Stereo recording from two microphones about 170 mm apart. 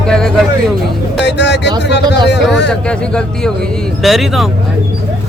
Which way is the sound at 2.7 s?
5° left (ahead or behind).